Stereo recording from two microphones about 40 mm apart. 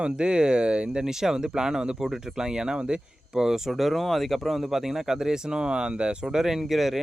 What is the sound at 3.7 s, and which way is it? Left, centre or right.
Speech, centre.